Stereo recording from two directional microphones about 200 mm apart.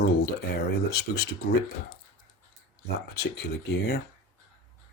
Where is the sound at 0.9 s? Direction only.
55° left (ahead or behind).